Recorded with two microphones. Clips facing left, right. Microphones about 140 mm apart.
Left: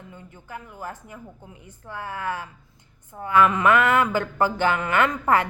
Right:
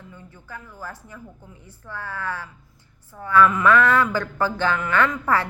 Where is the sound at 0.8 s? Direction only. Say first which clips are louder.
Left 1 dB; 20° left (ahead or behind).